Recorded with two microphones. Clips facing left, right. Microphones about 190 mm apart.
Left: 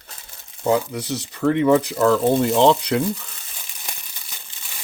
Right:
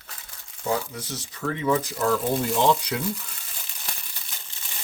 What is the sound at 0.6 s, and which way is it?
Speech, 70° left (ahead or behind).